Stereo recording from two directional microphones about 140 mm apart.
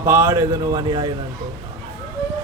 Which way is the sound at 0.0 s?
15° right (ahead or behind).